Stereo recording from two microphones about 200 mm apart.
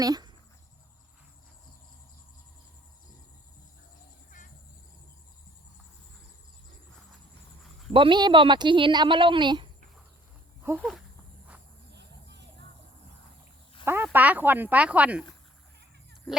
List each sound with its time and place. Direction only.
0.0 s speech: 20° right (ahead or behind)
4.3 s cricket: 40° left (ahead or behind)
7.9 s speech: 25° right (ahead or behind)
10.8 s speech: centre (ahead or behind)
11.9 s a sound: 60° right (ahead or behind)
13.8 s speech: 10° right (ahead or behind)